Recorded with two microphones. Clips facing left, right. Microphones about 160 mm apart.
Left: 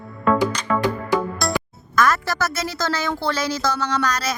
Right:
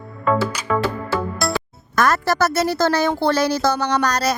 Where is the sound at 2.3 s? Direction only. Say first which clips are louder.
Right 7 dB; 65° right (ahead or behind).